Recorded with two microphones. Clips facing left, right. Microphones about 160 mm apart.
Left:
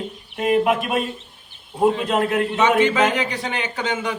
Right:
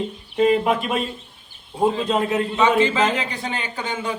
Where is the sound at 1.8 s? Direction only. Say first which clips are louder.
Left 2 dB; 5° left (ahead or behind).